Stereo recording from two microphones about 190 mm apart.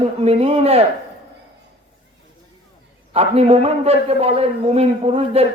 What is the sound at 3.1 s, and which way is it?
A man's voice, 35° right (ahead or behind).